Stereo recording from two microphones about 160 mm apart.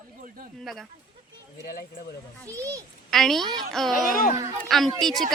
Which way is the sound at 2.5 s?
20° right (ahead or behind).